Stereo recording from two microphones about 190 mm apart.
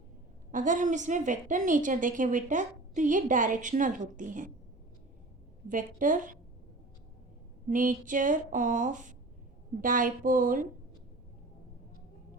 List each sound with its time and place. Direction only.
0.5 s a woman's voice: 40° right (ahead or behind)
5.6 s a woman's voice: 45° right (ahead or behind)
7.7 s a woman's voice: 45° right (ahead or behind)